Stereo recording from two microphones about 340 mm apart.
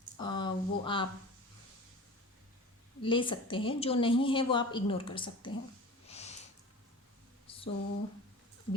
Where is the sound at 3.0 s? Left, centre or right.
Centre.